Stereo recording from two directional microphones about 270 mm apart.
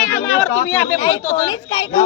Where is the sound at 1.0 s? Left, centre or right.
Left.